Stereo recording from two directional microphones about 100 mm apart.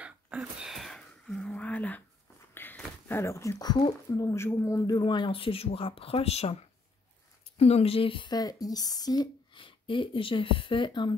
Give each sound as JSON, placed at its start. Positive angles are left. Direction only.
{"t": 0.4, "sound": "a sound", "side_deg": 0}
{"t": 3.5, "sound": "speech", "side_deg": 45}
{"t": 4.2, "sound": "speech", "side_deg": 25}
{"t": 4.9, "sound": "speech", "side_deg": 50}
{"t": 8.3, "sound": "speech", "side_deg": 40}
{"t": 9.6, "sound": "speech", "side_deg": 55}